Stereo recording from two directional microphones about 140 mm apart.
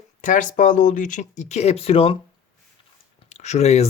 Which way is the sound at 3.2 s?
55° left (ahead or behind).